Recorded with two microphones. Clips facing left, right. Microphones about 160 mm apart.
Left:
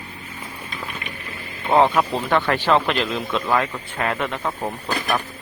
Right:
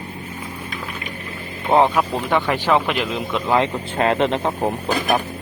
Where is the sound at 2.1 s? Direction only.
15° right (ahead or behind).